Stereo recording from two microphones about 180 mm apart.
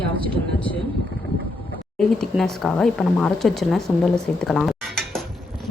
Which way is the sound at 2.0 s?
5° left (ahead or behind).